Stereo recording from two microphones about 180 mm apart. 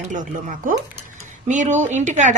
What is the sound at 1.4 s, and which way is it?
Speech, 40° right (ahead or behind).